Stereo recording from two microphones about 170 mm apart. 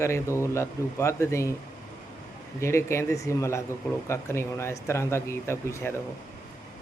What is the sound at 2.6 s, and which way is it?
Speech, 15° left (ahead or behind).